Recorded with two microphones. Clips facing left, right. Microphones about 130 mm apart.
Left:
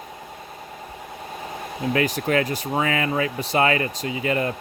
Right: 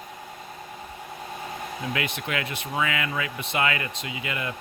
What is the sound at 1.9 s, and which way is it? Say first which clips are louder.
Speech: left 10 dB; 40° left (ahead or behind).